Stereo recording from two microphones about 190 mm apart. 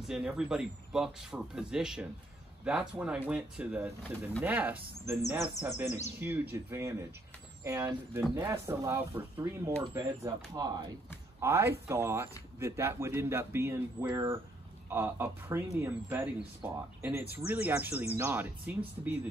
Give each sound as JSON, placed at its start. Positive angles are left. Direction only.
{"t": 0.1, "sound": "speech", "side_deg": -5}